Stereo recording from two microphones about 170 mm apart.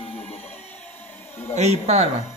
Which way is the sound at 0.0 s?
35° left (ahead or behind).